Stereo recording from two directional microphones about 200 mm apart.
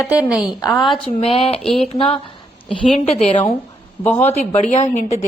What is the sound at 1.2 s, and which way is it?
Speech, 30° left (ahead or behind).